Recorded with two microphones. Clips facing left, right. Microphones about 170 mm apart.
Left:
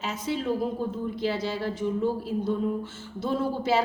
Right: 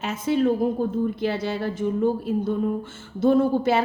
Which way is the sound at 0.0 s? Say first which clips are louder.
Right 8 dB; 55° right (ahead or behind).